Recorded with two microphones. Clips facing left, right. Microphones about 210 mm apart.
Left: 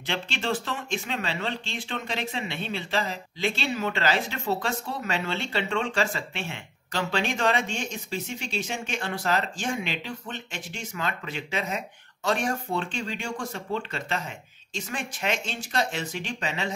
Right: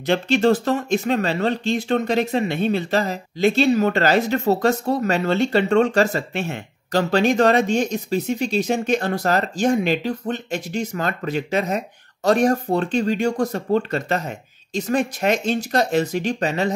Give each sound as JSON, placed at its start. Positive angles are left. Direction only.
{"t": 0.0, "sound": "speech", "side_deg": -40}